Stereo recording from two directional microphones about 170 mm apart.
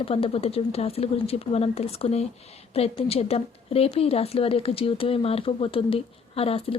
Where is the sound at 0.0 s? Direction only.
35° left (ahead or behind).